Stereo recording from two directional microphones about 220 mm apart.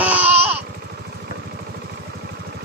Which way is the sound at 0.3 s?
25° right (ahead or behind).